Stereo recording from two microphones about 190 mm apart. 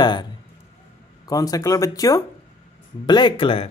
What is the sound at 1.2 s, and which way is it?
Speech, 20° left (ahead or behind).